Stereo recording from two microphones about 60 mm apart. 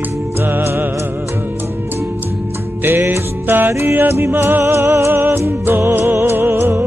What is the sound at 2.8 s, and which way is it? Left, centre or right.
Music, right.